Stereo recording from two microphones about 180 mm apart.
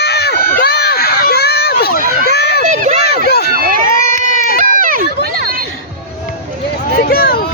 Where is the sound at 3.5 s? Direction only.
50° right (ahead or behind).